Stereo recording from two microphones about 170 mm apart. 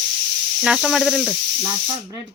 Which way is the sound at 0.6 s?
Centre (ahead or behind).